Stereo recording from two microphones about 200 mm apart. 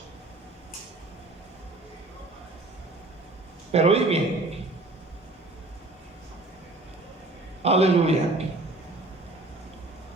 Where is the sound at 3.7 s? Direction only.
30° right (ahead or behind).